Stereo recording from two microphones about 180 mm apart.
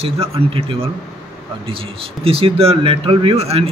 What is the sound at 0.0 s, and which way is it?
Speech, 30° right (ahead or behind).